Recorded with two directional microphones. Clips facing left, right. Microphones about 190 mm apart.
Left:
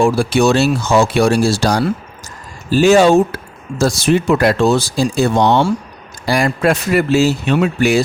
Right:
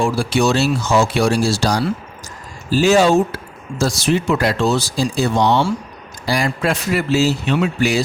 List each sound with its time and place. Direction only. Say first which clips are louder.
0.0 s speech: left 4 dB; 55° left (ahead or behind)